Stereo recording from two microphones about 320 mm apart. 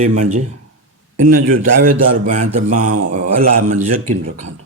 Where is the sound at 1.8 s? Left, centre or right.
Right.